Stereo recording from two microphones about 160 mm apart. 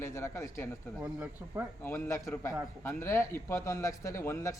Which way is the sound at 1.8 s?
15° left (ahead or behind).